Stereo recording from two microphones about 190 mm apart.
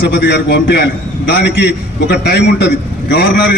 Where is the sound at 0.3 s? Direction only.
60° left (ahead or behind).